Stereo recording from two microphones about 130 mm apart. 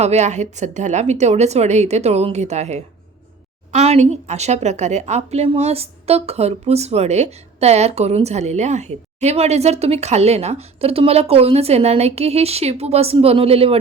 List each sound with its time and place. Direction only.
0.0 s a woman's voice: 60° right (ahead or behind)